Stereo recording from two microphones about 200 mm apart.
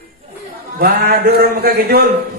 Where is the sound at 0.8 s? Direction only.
50° right (ahead or behind).